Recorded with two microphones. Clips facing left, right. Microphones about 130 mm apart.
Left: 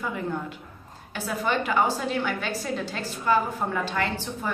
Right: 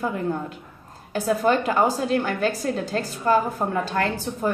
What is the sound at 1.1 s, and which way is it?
Speech, 40° right (ahead or behind).